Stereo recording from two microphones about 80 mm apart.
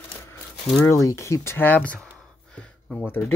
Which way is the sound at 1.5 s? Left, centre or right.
Left.